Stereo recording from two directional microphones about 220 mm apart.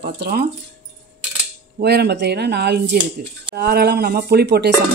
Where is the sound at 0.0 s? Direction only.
45° right (ahead or behind).